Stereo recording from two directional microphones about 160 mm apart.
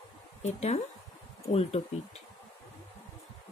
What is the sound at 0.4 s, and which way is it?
Speech, 45° left (ahead or behind).